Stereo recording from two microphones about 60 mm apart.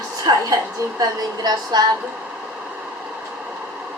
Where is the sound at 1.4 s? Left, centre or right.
Right.